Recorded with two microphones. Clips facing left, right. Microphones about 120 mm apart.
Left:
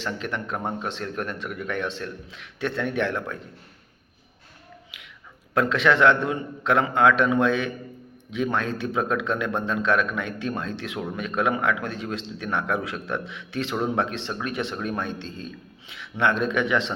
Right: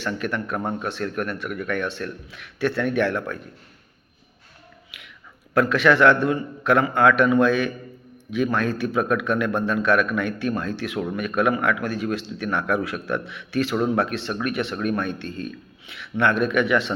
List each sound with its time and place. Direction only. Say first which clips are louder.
0.0 s a man's voice: right 3 dB; 25° left (ahead or behind)
5.5 s a man's voice: right 3 dB; 20° left (ahead or behind)